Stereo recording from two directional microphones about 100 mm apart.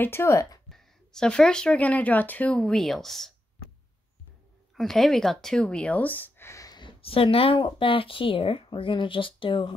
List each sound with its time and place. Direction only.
0.0 s speech: 25° left (ahead or behind)
0.7 s speech: 5° left (ahead or behind)
4.7 s speech: 5° left (ahead or behind); by 6.8 s 35° left (ahead or behind)
6.8 s speech: 60° left (ahead or behind)